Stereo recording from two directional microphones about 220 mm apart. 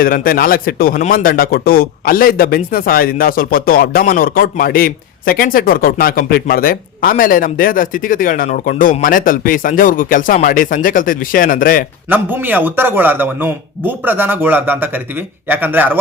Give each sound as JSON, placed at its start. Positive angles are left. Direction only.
{"t": 0.0, "sound": "speech", "side_deg": 40}
{"t": 12.0, "sound": "speech", "side_deg": -10}